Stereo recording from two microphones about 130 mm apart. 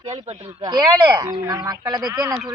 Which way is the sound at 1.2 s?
30° right (ahead or behind).